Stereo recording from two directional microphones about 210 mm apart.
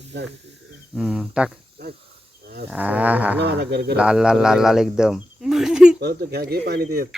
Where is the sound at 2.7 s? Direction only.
5° right (ahead or behind).